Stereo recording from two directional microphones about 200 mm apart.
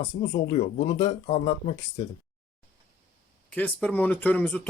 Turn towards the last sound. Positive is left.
turn(degrees=5)  # may be behind; listen again after turning